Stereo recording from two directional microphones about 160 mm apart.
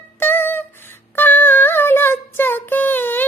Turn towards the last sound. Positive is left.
turn(degrees=10)  # may be behind; listen again after turning